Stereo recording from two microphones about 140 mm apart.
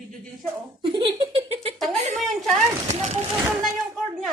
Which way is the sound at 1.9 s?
55° right (ahead or behind).